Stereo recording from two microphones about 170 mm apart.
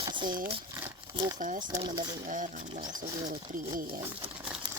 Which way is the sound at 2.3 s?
50° right (ahead or behind).